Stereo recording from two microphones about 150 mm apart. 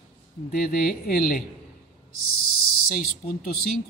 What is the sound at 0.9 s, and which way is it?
Speech, 80° left.